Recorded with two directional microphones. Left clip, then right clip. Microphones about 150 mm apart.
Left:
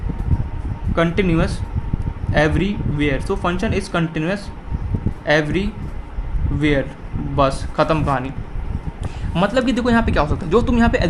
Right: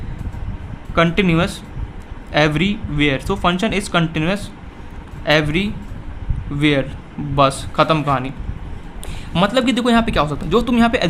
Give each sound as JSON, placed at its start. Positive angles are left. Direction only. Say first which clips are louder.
{"t": 0.9, "sound": "speech", "louder": "right 2 dB", "side_deg": -45}
{"t": 9.3, "sound": "a man's voice", "louder": "right 2 dB", "side_deg": -35}